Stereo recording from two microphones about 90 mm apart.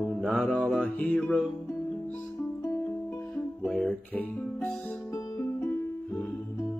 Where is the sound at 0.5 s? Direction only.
10° left (ahead or behind).